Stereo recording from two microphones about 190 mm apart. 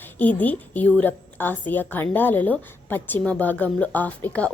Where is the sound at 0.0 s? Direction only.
10° left (ahead or behind).